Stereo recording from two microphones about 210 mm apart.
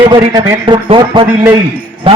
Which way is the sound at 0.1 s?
20° right (ahead or behind).